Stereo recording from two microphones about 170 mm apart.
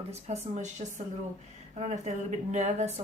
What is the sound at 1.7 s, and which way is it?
Speech, 40° right (ahead or behind).